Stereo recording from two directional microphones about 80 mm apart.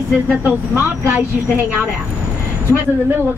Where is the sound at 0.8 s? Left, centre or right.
Right.